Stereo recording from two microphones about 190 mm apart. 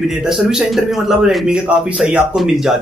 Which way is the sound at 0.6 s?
5° right (ahead or behind).